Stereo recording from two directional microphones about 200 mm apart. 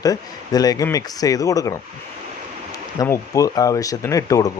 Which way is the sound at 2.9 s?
15° left (ahead or behind).